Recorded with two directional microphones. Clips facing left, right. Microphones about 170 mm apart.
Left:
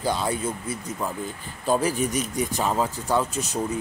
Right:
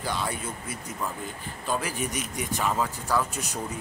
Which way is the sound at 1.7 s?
35° left (ahead or behind).